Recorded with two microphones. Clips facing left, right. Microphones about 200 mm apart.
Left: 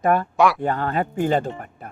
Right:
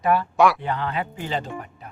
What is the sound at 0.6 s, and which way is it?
Speech, 45° left (ahead or behind).